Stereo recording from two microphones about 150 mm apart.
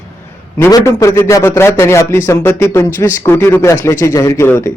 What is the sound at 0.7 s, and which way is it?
Speech, 20° left (ahead or behind).